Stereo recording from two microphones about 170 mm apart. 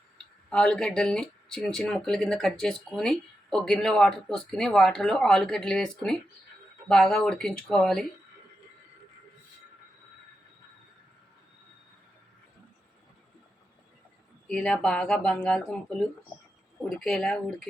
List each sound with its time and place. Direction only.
0.5 s speech: 5° left (ahead or behind)
14.4 s speech: 5° left (ahead or behind)